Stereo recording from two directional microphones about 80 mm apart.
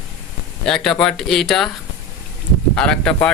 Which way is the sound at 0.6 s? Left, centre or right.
Centre.